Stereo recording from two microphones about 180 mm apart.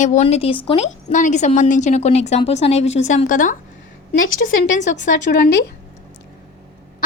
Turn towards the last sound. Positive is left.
turn(degrees=70)  # may be behind; listen again after turning